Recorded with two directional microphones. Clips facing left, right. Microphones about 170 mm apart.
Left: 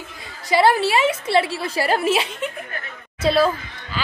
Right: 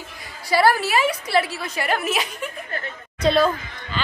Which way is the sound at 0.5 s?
20° left (ahead or behind).